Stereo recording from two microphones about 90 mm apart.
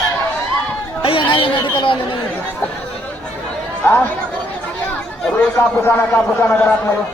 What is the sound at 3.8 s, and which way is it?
Speech, 25° left (ahead or behind).